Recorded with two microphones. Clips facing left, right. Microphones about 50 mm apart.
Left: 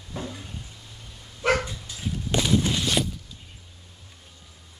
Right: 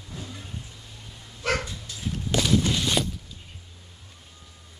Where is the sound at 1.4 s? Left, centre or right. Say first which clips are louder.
Left 4 dB; left.